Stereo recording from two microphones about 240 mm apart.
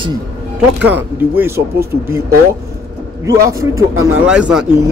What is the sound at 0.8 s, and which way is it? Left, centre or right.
A man's voice, centre.